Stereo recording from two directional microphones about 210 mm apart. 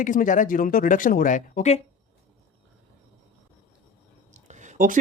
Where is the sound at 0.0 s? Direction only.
40° left (ahead or behind).